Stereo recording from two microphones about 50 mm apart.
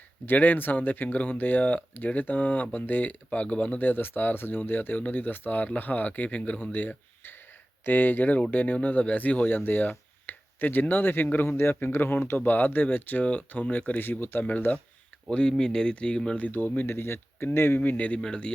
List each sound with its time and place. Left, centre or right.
0.3 s speech: left
3.2 s speech: left
14.0 s speech: left
14.4 s speech: left
15.3 s speech: centre
16.4 s speech: left
17.7 s speech: left
18.2 s speech: centre